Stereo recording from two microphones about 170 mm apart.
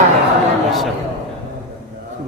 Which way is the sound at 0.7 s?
Centre (ahead or behind).